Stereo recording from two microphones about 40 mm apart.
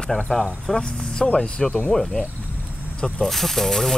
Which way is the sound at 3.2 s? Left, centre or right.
Centre.